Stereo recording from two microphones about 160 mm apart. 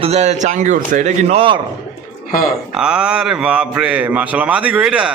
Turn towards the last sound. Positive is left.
turn(degrees=-5)  # may be behind; listen again after turning